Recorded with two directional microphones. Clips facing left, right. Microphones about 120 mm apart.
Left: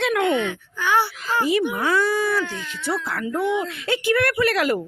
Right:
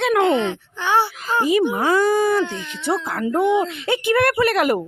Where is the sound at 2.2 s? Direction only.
20° right (ahead or behind).